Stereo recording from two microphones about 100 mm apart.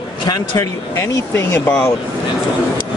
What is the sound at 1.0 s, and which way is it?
Speech, 20° left (ahead or behind).